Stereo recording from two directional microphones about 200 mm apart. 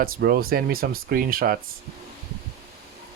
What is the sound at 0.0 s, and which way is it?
Speech, 50° right (ahead or behind).